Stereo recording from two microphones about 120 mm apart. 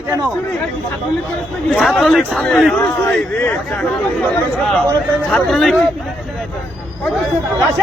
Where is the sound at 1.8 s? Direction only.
Centre (ahead or behind).